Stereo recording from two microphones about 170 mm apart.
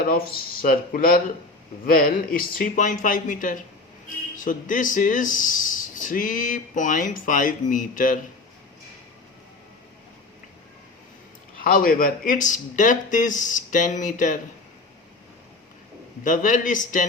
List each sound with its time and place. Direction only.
0.0 s speech: 60° left (ahead or behind)
11.6 s speech: 55° left (ahead or behind)
16.2 s speech: 50° left (ahead or behind)